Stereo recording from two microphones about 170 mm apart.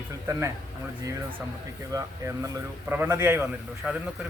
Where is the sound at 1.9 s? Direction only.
20° right (ahead or behind).